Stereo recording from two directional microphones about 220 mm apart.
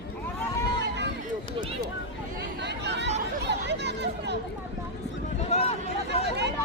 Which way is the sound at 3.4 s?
50° right (ahead or behind).